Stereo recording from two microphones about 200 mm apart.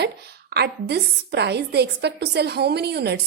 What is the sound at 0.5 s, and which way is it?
A woman's voice, 55° right (ahead or behind).